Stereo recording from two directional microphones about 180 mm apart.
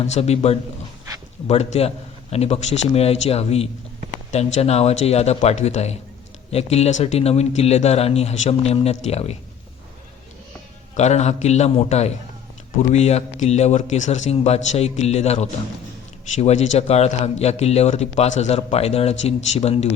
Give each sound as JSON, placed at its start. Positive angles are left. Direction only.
{"t": 0.0, "sound": "speech", "side_deg": 35}
{"t": 10.9, "sound": "speech", "side_deg": 40}